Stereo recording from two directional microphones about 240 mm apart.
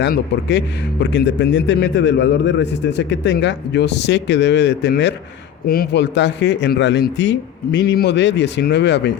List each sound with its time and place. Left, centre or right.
0.0 s a man's voice: left